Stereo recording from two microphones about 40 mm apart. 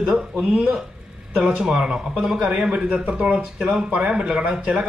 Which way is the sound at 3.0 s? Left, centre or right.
Right.